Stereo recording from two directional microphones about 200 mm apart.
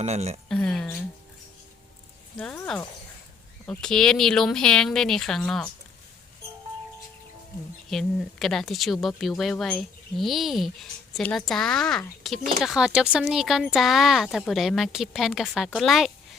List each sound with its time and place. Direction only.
0.0 s speech: 35° right (ahead or behind)
0.4 s mouse: 5° left (ahead or behind)
2.4 s speech: 5° left (ahead or behind)
7.9 s speech: centre (ahead or behind)